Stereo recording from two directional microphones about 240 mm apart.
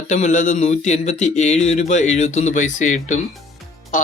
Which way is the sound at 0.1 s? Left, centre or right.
Left.